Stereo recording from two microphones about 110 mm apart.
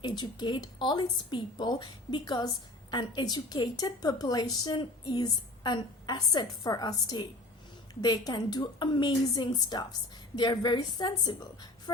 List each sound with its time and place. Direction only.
0.0 s a woman's voice: 40° left (ahead or behind)